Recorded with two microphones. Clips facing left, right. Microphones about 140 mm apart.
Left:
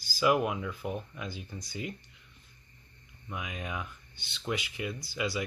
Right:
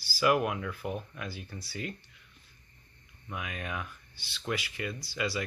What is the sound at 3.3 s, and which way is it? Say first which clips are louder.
Speech: even; 15° left (ahead or behind).